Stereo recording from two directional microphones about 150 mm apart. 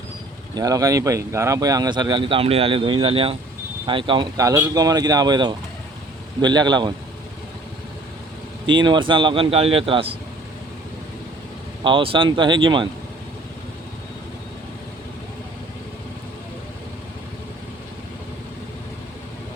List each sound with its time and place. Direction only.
0.5 s speech: 25° right (ahead or behind)
4.4 s speech: 20° right (ahead or behind)
8.6 s speech: 30° right (ahead or behind)
11.8 s speech: 35° right (ahead or behind)